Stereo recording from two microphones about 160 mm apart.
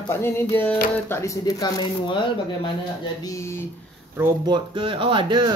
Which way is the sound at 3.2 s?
20° left (ahead or behind).